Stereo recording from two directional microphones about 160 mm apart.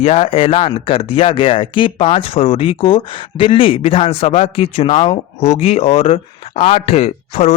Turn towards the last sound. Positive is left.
turn(degrees=40)  # may be behind; listen again after turning